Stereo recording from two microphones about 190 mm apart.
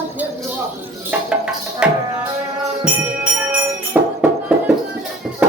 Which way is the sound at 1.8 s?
5° right (ahead or behind).